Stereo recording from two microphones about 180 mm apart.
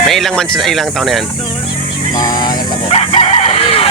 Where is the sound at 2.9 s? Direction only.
35° left (ahead or behind).